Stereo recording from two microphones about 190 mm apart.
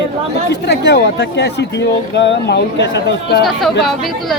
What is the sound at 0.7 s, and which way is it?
Speech, 65° left (ahead or behind).